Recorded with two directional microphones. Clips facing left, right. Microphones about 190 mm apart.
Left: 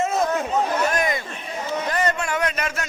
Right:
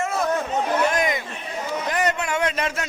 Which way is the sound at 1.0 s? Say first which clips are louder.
Even; 15° right (ahead or behind).